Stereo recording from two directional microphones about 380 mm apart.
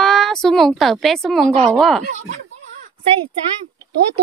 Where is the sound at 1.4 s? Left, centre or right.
Centre.